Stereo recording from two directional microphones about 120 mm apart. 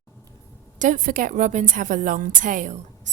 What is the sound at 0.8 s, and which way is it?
A woman's voice, 90° right.